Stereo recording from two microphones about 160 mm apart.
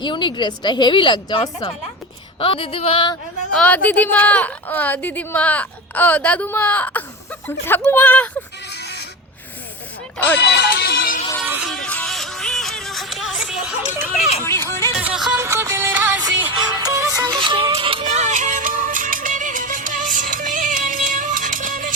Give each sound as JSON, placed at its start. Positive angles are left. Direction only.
{"t": 0.0, "sound": "a woman's voice", "side_deg": 30}
{"t": 2.4, "sound": "a sound", "side_deg": 35}
{"t": 3.5, "sound": "a woman's voice", "side_deg": 10}
{"t": 8.7, "sound": "a sound", "side_deg": 90}
{"t": 10.5, "sound": "music", "side_deg": 90}
{"t": 11.4, "sound": "music", "side_deg": -10}
{"t": 11.7, "sound": "music", "side_deg": 5}
{"t": 14.4, "sound": "music", "side_deg": 15}
{"t": 14.9, "sound": "music", "side_deg": -5}
{"t": 15.4, "sound": "music", "side_deg": -20}
{"t": 16.7, "sound": "music", "side_deg": -25}
{"t": 18.0, "sound": "music", "side_deg": -45}